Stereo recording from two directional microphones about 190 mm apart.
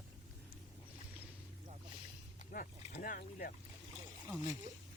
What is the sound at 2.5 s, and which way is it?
Speech, 45° left (ahead or behind).